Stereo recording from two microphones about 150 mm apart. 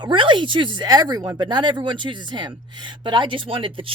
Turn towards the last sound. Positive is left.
turn(degrees=-35)  # may be behind; listen again after turning